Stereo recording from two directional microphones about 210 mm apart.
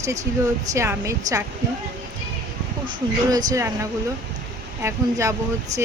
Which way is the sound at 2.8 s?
20° right (ahead or behind).